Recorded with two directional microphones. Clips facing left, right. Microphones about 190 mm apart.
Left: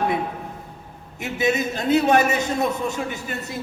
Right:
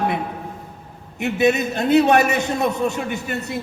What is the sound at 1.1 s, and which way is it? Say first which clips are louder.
A man's voice: right 4 dB; 65° right (ahead or behind).